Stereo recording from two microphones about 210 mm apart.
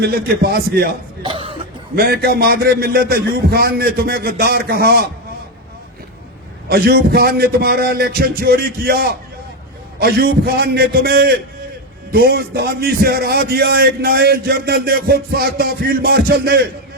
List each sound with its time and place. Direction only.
0.0 s a man's voice: 50° right (ahead or behind)
1.2 s speech: 25° right (ahead or behind)
2.0 s a man's voice: 50° right (ahead or behind)
6.7 s a man's voice: 45° right (ahead or behind)